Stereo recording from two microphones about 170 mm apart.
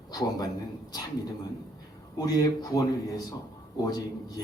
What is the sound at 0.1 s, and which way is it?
Speech, 20° left (ahead or behind).